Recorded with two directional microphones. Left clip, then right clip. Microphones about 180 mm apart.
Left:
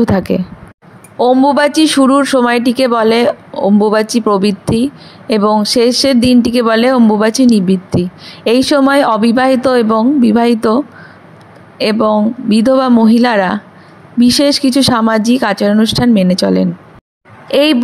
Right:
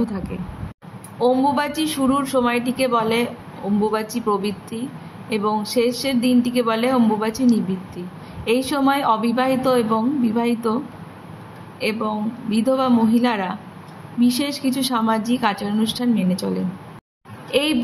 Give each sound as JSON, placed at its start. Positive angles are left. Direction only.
{"t": 0.0, "sound": "speech", "side_deg": 50}
{"t": 11.8, "sound": "speech", "side_deg": 50}